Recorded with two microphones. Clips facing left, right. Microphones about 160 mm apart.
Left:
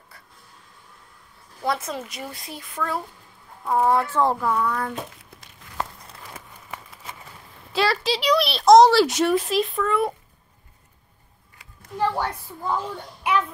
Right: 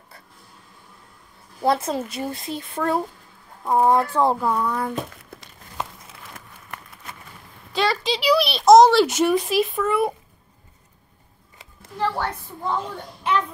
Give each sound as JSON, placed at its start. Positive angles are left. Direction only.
{"t": 1.6, "sound": "speech", "side_deg": -30}
{"t": 3.6, "sound": "speech", "side_deg": -15}
{"t": 5.1, "sound": "crumpling", "side_deg": -55}
{"t": 5.9, "sound": "a sound", "side_deg": 0}
{"t": 7.7, "sound": "speech", "side_deg": 0}
{"t": 12.0, "sound": "a child's voice", "side_deg": 10}
{"t": 13.2, "sound": "child singing", "side_deg": 10}